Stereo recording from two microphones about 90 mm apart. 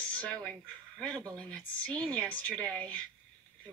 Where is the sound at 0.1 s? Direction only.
15° left (ahead or behind).